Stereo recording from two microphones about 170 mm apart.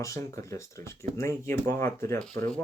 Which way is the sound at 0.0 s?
20° left (ahead or behind).